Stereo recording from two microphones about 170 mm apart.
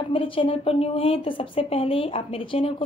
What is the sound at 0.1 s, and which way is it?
A woman's voice, 30° left (ahead or behind).